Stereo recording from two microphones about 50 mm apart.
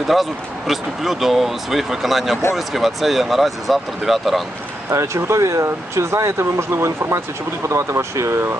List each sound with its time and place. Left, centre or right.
0.1 s speech: centre
4.9 s speech: right
7.7 s speech: right